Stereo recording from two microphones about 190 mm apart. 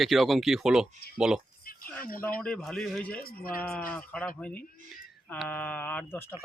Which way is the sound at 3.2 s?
50° left (ahead or behind).